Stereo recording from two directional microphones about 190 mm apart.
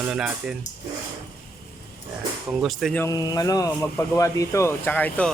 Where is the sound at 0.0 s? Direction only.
5° right (ahead or behind).